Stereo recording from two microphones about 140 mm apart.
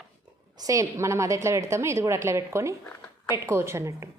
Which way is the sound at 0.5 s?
25° right (ahead or behind).